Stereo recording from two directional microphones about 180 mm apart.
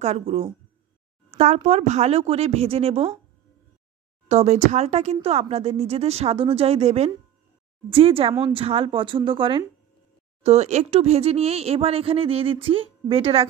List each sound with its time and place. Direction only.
0.0 s speech: 35° right (ahead or behind)
4.3 s a woman's voice: 40° right (ahead or behind)